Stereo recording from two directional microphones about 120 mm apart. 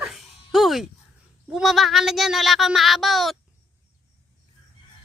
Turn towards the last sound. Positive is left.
turn(degrees=0)  # may be behind; listen again after turning